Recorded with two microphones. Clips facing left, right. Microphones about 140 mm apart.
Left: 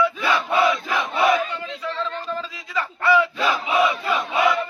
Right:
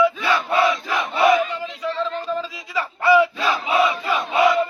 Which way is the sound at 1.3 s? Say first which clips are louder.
Right 3 dB; 5° right (ahead or behind).